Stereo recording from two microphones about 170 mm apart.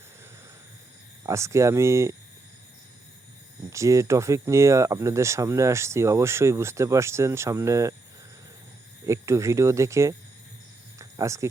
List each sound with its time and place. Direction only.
1.2 s speech: 15° right (ahead or behind)
3.7 s speech: 20° right (ahead or behind)
9.0 s speech: 15° right (ahead or behind)
10.9 s a sound: 15° right (ahead or behind)